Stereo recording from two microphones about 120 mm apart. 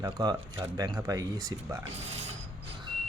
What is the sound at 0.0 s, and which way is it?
Speech, 30° right (ahead or behind).